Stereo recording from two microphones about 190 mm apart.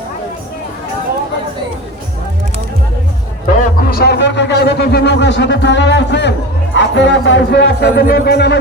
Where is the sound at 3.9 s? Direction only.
55° left (ahead or behind).